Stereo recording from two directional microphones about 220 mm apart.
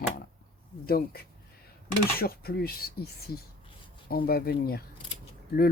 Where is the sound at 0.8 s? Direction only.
45° left (ahead or behind).